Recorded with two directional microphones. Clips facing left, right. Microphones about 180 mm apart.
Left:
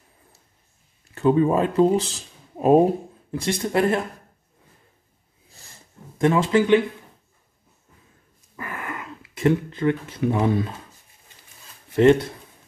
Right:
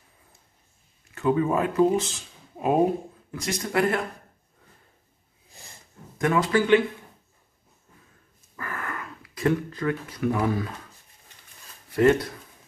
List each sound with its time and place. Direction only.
1.1 s speech: 30° left (ahead or behind)
3.3 s speech: 30° left (ahead or behind)
6.1 s speech: 25° left (ahead or behind)
8.5 s a sound: 15° left (ahead or behind)
11.9 s speech: 25° left (ahead or behind)